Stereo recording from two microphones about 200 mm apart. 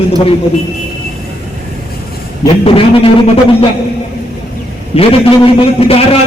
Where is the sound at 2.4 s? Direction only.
30° left (ahead or behind).